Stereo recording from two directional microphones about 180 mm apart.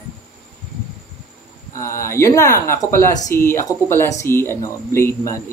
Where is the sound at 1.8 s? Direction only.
15° left (ahead or behind).